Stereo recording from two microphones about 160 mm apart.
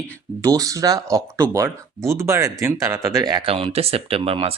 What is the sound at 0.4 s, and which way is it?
A man's voice, 20° right (ahead or behind).